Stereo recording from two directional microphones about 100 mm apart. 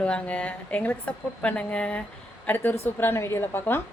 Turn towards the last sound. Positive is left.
turn(degrees=20)  # may be behind; listen again after turning